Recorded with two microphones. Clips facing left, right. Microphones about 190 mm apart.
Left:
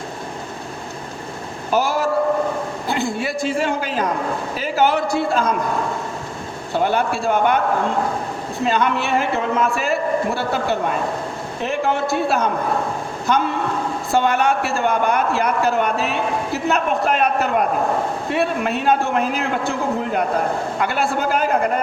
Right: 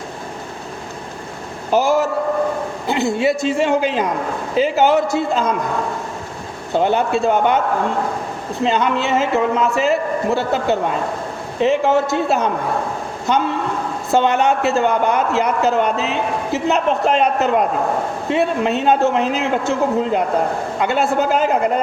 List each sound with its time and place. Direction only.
1.7 s a man's voice: 20° right (ahead or behind)
6.7 s a man's voice: 20° right (ahead or behind)
8.6 s a man's voice: 20° right (ahead or behind)
14.1 s a man's voice: 20° right (ahead or behind)